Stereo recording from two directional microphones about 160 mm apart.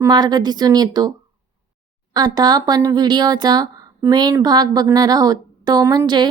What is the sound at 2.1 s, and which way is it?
Speech, 25° right (ahead or behind).